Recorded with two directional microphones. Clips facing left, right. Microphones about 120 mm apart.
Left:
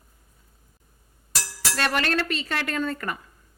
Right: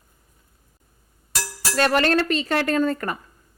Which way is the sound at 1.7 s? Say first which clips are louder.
Right 6 dB; 40° right (ahead or behind).